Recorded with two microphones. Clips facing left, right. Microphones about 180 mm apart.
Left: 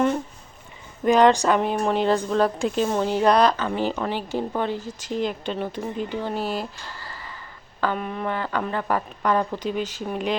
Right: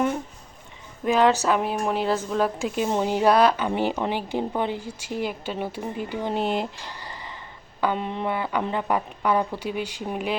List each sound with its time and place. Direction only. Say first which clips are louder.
1.0 s a woman's voice: left 3 dB; 5° right (ahead or behind); by 7.3 s 20° right (ahead or behind)
7.8 s a sound: right 1 dB; 20° right (ahead or behind)
8.3 s a woman's voice: even; 10° right (ahead or behind)